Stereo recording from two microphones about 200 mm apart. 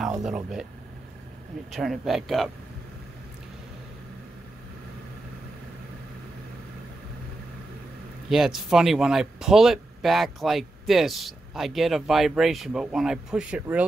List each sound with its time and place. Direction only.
0.2 s speech: 5° right (ahead or behind)
1.7 s speech: centre (ahead or behind)
8.3 s speech: centre (ahead or behind)